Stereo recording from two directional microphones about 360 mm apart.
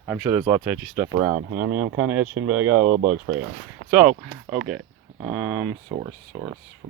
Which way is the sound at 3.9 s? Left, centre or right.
Centre.